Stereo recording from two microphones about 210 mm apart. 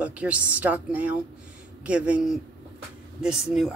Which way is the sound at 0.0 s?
5° right (ahead or behind).